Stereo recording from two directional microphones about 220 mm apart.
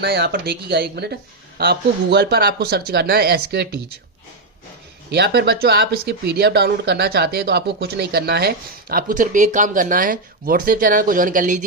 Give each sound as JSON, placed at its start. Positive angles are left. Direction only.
{"t": 0.0, "sound": "speech", "side_deg": -45}
{"t": 5.1, "sound": "speech", "side_deg": -45}